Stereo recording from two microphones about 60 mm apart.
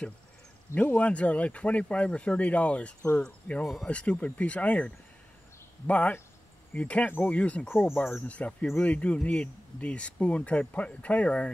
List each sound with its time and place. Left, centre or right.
0.7 s speech: left
3.6 s speech: centre
3.9 s speech: centre
7.7 s speech: centre
8.3 s speech: left